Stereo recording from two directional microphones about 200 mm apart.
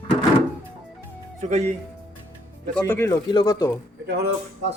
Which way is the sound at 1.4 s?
35° right (ahead or behind).